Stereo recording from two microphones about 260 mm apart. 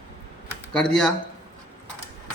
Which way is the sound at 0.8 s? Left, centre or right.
Centre.